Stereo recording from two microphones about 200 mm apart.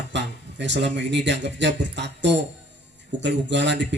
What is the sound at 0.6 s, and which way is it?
Speech, 60° right (ahead or behind).